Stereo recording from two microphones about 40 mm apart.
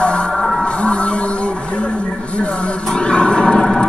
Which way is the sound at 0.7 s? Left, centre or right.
Left.